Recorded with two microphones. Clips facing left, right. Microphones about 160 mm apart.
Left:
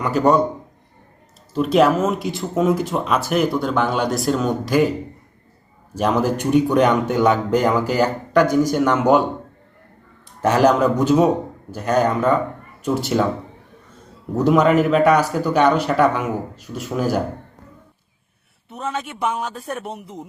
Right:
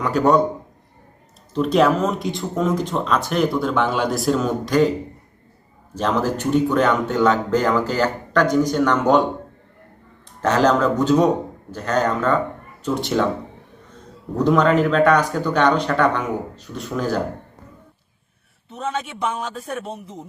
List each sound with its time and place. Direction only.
0.0 s speech: centre (ahead or behind)
1.5 s speech: centre (ahead or behind)
5.9 s speech: 10° left (ahead or behind)
10.4 s speech: 10° left (ahead or behind)
14.3 s speech: 5° left (ahead or behind)
18.7 s speech: 5° left (ahead or behind)